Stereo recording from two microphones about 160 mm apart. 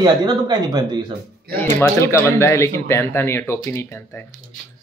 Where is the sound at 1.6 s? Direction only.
15° left (ahead or behind).